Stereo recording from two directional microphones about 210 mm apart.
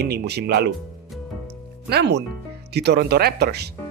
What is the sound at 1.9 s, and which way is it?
Speech, 50° right (ahead or behind).